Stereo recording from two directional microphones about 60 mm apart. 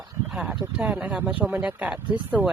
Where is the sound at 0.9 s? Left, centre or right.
Centre.